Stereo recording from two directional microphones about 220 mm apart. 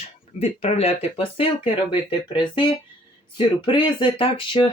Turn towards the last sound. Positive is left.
turn(degrees=25)  # may be behind; listen again after turning